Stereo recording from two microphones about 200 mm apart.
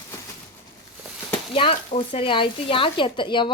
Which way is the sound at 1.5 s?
25° left (ahead or behind).